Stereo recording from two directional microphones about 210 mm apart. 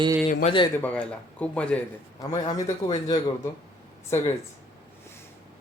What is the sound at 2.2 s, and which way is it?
A man's voice, 20° left (ahead or behind).